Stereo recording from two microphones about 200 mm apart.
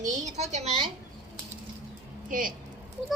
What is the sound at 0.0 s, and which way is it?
Speech, 35° right (ahead or behind).